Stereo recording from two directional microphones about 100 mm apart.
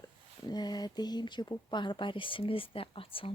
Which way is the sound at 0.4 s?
45° left (ahead or behind).